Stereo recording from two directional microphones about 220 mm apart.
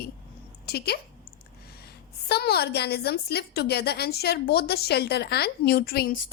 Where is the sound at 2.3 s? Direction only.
45° left (ahead or behind).